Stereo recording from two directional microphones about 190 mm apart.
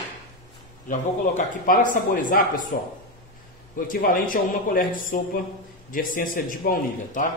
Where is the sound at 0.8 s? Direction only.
45° left (ahead or behind).